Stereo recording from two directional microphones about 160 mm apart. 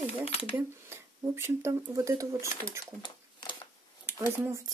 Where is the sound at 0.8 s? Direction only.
15° right (ahead or behind).